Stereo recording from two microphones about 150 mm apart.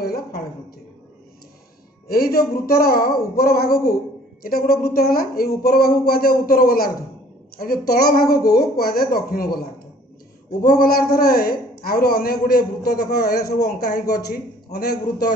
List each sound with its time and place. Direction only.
0.0 s a sound: 90° left
2.0 s speech: 80° left
10.7 s a man's voice: 80° left